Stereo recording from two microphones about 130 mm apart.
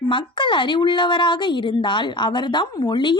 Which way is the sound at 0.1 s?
40° left (ahead or behind).